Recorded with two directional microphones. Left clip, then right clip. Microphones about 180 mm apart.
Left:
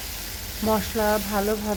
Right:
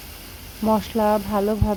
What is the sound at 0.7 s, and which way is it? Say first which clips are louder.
Speech: right 3 dB; 15° right (ahead or behind).